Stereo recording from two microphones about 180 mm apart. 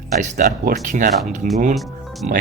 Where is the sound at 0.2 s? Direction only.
45° right (ahead or behind).